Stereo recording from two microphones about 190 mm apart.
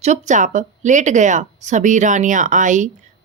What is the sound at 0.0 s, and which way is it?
Speech, 40° right (ahead or behind).